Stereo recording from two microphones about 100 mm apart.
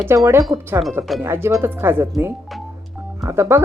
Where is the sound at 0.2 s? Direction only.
30° right (ahead or behind).